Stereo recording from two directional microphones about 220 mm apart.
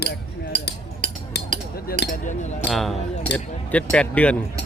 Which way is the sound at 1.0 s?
35° right (ahead or behind).